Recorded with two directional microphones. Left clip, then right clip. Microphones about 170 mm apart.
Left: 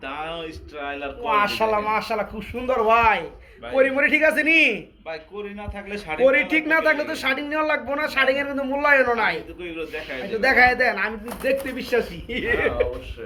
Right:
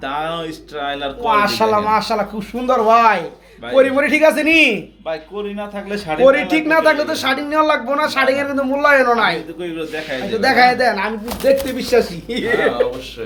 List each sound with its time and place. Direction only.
0.0 s speech: 50° right (ahead or behind)
1.3 s a man's voice: 10° right (ahead or behind)
5.5 s speech: 45° right (ahead or behind)
6.2 s a man's voice: 5° right (ahead or behind)
10.4 s speech: centre (ahead or behind)